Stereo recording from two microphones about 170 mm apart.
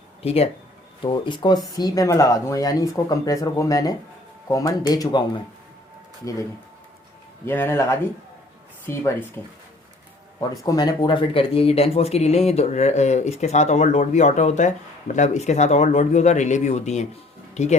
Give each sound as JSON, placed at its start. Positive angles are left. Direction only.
{"t": 0.2, "sound": "speech", "side_deg": 35}
{"t": 7.4, "sound": "speech", "side_deg": 15}
{"t": 10.5, "sound": "speech", "side_deg": 20}